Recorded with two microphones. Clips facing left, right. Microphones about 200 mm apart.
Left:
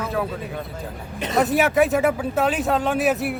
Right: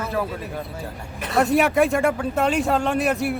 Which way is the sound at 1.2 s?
20° left (ahead or behind).